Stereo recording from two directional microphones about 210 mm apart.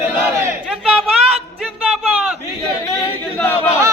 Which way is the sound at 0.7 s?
Centre (ahead or behind).